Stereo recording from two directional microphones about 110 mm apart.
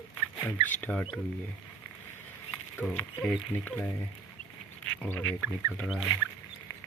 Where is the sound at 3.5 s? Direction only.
15° left (ahead or behind).